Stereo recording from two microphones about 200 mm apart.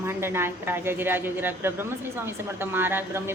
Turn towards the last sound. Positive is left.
turn(degrees=-10)  # may be behind; listen again after turning